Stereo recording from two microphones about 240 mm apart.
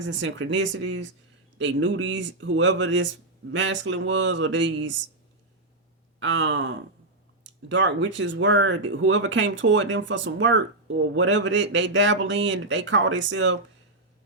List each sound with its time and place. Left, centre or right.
0.0 s speech: right
6.1 s speech: right